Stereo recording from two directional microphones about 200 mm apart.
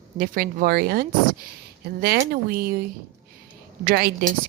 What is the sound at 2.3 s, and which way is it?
A woman's voice, 50° right (ahead or behind).